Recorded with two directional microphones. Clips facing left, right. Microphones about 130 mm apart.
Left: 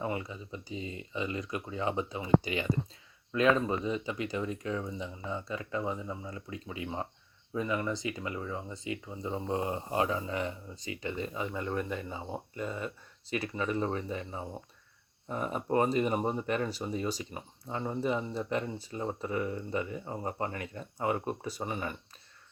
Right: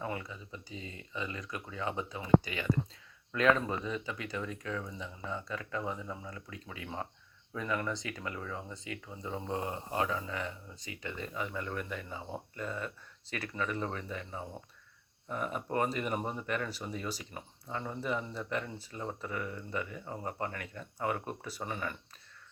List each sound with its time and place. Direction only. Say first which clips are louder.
0.0 s speech: left 4 dB; 20° left (ahead or behind)